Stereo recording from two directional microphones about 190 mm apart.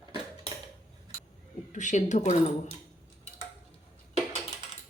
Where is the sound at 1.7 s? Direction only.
40° left (ahead or behind).